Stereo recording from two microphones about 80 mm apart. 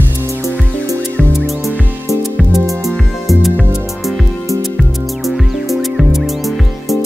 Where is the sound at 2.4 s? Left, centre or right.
Centre.